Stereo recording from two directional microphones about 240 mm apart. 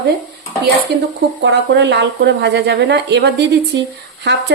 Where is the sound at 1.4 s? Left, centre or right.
Right.